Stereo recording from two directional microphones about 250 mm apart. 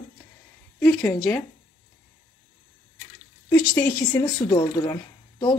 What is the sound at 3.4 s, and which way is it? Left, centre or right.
Speech, centre.